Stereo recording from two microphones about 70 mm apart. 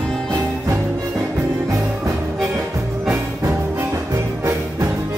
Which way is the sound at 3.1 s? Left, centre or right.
Right.